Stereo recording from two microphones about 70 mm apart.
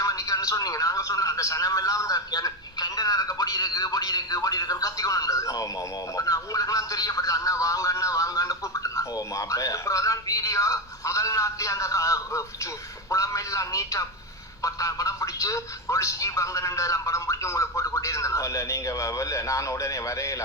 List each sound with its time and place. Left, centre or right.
0.0 s a man's voice: left